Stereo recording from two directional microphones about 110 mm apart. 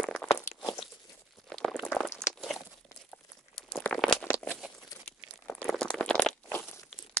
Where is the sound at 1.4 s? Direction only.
Centre (ahead or behind).